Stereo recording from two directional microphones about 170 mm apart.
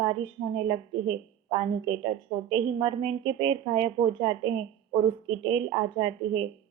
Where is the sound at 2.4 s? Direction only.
30° right (ahead or behind).